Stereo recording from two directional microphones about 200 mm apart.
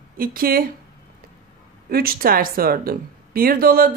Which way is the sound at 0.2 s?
45° right (ahead or behind).